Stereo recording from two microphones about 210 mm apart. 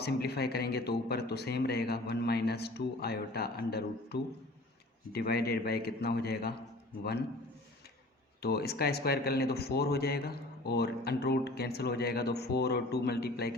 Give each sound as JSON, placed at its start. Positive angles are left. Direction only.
{"t": 0.0, "sound": "speech", "side_deg": 50}
{"t": 8.4, "sound": "speech", "side_deg": 50}